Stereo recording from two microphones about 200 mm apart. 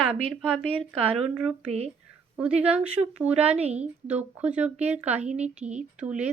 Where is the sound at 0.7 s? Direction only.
30° right (ahead or behind).